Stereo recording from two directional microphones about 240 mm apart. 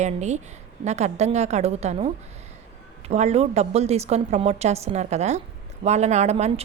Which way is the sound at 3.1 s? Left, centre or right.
Right.